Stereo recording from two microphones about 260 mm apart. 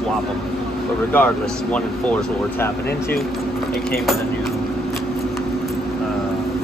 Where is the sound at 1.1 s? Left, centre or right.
Centre.